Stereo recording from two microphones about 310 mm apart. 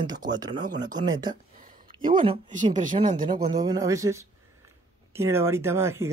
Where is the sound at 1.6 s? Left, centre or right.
Right.